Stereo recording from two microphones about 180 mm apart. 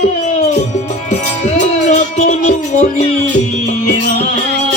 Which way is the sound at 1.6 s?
40° left (ahead or behind).